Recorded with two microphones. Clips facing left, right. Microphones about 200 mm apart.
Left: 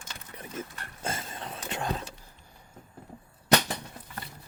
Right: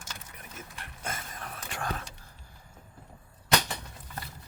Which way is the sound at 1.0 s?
30° left (ahead or behind).